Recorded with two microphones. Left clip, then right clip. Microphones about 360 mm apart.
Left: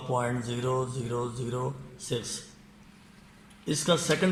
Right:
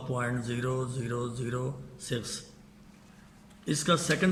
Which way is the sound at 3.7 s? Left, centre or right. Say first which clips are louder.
Left 1 dB; centre.